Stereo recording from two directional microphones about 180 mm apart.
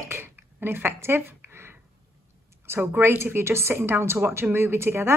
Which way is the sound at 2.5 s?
15° right (ahead or behind).